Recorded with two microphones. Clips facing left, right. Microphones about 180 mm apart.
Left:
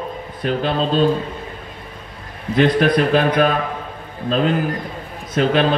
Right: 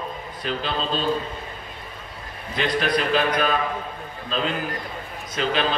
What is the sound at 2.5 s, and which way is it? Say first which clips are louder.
A man's voice: left 8 dB; 55° left (ahead or behind).